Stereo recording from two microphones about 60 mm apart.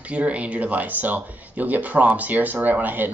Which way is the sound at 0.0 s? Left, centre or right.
Right.